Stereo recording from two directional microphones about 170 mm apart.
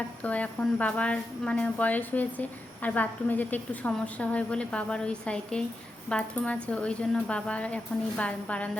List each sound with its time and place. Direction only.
0.2 s a woman's voice: 10° left (ahead or behind)